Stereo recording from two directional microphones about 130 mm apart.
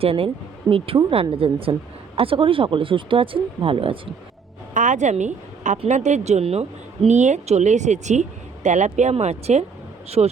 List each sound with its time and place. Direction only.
0.0 s speech: 45° right (ahead or behind)
4.7 s speech: 75° right (ahead or behind); by 9.6 s 60° right (ahead or behind)
10.2 s speech: 35° right (ahead or behind)